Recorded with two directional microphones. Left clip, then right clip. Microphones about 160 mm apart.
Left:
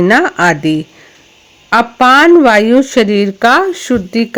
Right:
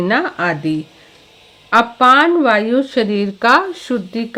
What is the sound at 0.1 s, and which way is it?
Speech, 45° left (ahead or behind).